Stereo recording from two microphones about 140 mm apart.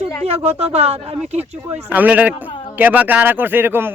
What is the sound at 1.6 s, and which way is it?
Speech, 15° right (ahead or behind).